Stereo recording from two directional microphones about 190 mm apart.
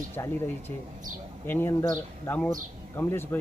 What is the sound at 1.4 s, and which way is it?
Speech, 10° left (ahead or behind).